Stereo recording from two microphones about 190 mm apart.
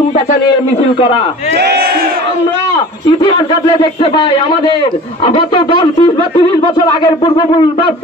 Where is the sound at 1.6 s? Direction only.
55° right (ahead or behind).